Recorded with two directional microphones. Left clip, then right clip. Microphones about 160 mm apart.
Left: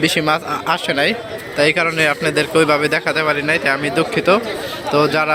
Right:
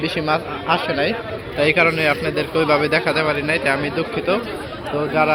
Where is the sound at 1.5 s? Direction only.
10° left (ahead or behind).